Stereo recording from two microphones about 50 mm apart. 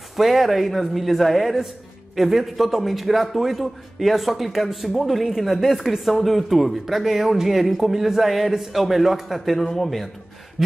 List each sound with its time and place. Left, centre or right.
0.1 s a man's voice: centre